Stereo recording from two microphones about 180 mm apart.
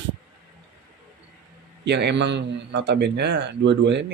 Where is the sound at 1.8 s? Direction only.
70° right (ahead or behind).